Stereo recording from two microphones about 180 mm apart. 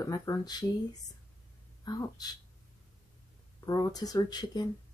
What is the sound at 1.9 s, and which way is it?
Speech, 25° left (ahead or behind).